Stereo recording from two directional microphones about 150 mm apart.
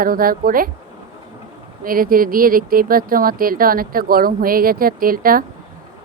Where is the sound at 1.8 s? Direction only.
70° right (ahead or behind).